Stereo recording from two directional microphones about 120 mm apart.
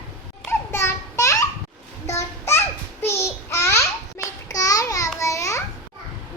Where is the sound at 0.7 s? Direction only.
20° left (ahead or behind).